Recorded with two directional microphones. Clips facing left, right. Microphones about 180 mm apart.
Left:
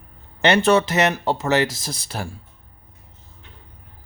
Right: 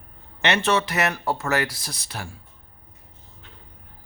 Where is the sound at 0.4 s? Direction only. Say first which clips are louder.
Left 6 dB; 35° left (ahead or behind).